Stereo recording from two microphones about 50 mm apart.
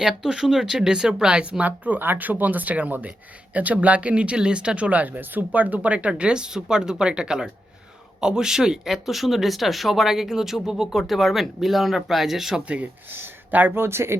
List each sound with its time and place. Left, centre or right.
0.0 s speech: centre
12.6 s speech: right
13.1 s speech: right
13.8 s speech: right